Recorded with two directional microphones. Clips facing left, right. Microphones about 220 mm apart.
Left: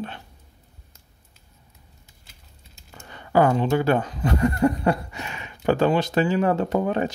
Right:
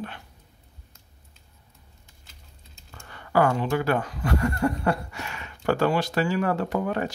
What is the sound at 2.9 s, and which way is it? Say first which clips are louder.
Speech: left 3 dB; 20° left (ahead or behind).